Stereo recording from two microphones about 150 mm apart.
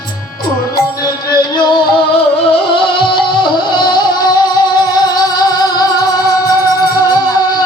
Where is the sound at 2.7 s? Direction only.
35° left (ahead or behind).